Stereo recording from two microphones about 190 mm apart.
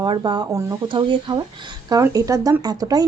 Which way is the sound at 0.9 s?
25° right (ahead or behind).